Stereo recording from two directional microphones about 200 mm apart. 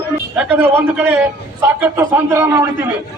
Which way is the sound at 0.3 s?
10° right (ahead or behind).